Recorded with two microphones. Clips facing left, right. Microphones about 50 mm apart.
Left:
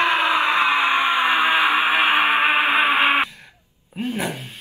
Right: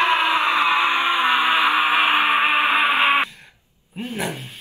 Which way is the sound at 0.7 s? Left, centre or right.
Left.